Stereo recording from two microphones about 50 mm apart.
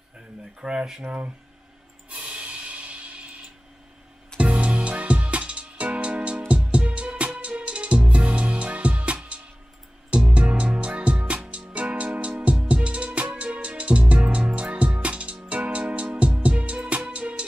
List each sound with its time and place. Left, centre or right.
0.6 s speech: centre
2.0 s music: right